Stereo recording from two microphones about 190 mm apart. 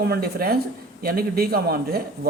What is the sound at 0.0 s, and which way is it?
Speech, 55° right (ahead or behind).